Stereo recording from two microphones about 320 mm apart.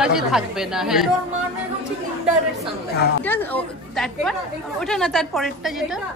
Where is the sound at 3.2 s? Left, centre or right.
Centre.